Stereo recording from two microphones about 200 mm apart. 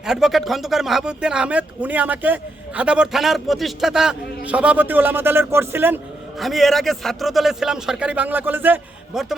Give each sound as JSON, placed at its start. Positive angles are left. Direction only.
{"t": 0.0, "sound": "speech", "side_deg": 0}
{"t": 6.4, "sound": "speech", "side_deg": 0}